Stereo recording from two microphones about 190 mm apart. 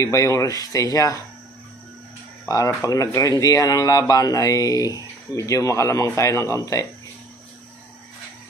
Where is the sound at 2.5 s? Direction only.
15° left (ahead or behind).